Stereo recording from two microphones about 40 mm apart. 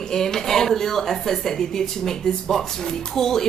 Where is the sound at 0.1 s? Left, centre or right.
Centre.